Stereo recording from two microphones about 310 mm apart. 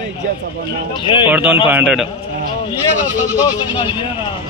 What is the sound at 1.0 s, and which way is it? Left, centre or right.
Speech, centre.